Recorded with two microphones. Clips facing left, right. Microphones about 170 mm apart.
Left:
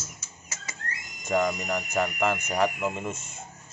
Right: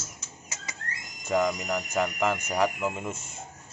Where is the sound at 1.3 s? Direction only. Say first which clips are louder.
Even; centre (ahead or behind).